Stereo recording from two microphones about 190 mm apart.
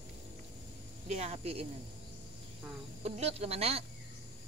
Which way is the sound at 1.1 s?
35° right (ahead or behind).